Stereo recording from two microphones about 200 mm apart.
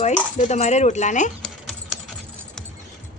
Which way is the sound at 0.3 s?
35° left (ahead or behind).